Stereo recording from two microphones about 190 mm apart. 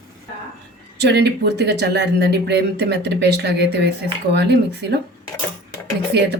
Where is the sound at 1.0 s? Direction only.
60° right (ahead or behind).